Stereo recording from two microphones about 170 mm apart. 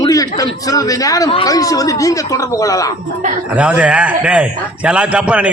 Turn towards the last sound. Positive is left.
turn(degrees=-5)  # may be behind; listen again after turning